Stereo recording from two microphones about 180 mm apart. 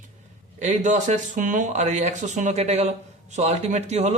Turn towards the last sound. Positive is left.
turn(degrees=-40)  # may be behind; listen again after turning